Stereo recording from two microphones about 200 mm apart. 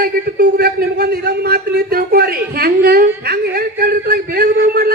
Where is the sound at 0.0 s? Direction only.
50° right (ahead or behind).